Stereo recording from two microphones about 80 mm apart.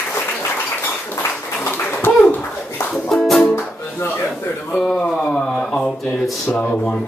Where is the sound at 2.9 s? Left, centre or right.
Centre.